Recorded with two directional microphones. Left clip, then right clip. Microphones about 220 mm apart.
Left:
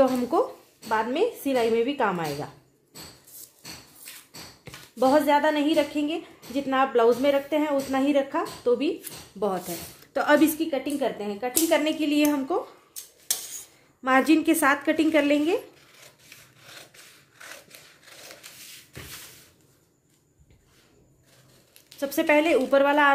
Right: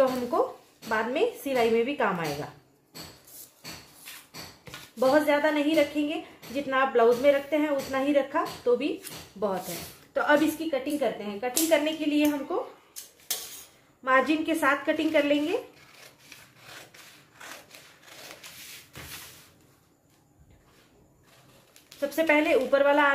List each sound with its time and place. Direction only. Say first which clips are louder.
0.8 s a woman's voice: left 2 dB; 35° left (ahead or behind)
4.6 s a woman's voice: left 2 dB; 40° left (ahead or behind)
10.1 s speech: left 3 dB; 50° left (ahead or behind)
14.0 s speech: left 3 dB; 50° left (ahead or behind)
22.1 s speech: left 2 dB; 45° left (ahead or behind)